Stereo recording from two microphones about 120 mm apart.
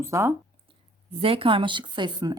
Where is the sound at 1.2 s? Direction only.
50° right (ahead or behind).